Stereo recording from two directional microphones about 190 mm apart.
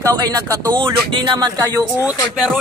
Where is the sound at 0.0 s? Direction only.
20° right (ahead or behind).